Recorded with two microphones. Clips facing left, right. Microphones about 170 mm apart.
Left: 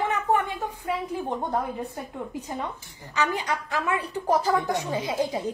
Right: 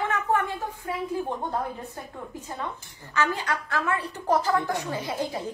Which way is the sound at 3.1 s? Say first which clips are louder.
Even; 15° left (ahead or behind).